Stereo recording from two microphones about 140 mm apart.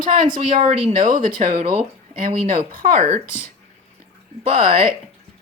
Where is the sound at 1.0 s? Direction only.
80° right.